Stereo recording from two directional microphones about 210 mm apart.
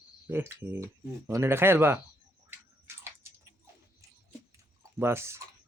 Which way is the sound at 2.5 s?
10° right (ahead or behind).